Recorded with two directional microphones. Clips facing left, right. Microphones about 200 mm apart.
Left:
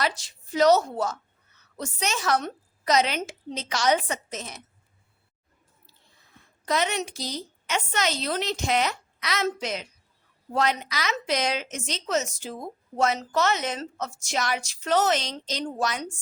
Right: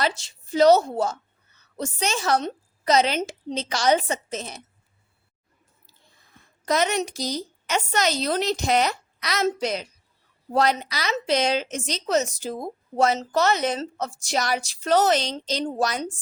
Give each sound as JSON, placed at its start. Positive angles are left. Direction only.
{"t": 0.0, "sound": "a woman's voice", "side_deg": -25}
{"t": 6.7, "sound": "a woman's voice", "side_deg": -40}